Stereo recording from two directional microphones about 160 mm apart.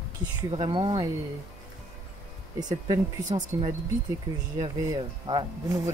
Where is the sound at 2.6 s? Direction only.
25° right (ahead or behind).